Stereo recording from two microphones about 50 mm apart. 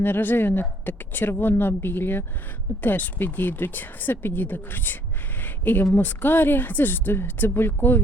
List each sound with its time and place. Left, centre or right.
0.0 s speech: left
5.4 s a sound: left
5.9 s speech: left